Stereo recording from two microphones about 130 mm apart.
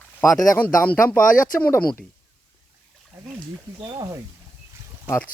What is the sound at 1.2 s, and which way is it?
Speech, 90° left.